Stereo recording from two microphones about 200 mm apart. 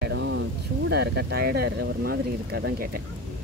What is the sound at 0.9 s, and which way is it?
Speech, 55° right (ahead or behind).